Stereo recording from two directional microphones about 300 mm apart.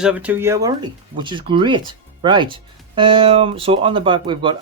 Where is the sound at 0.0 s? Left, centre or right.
Centre.